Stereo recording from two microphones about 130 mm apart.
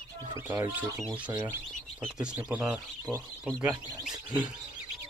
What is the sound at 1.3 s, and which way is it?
Speech, 15° right (ahead or behind).